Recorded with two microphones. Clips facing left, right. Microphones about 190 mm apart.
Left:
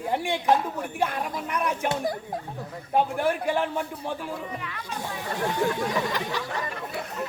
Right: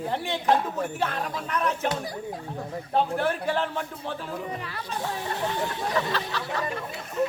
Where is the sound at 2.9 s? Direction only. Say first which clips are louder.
Left 1 dB; 10° left (ahead or behind).